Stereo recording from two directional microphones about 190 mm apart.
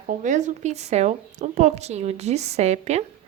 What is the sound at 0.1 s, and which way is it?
Speech, 40° right (ahead or behind).